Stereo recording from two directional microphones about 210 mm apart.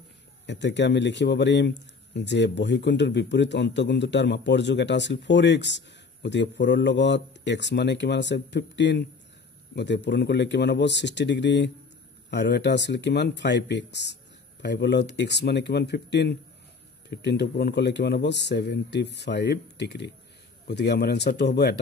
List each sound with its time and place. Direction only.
0.5 s a man's voice: 55° left (ahead or behind)